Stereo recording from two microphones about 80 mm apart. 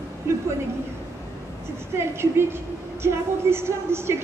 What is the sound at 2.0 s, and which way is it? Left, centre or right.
A woman's voice, right.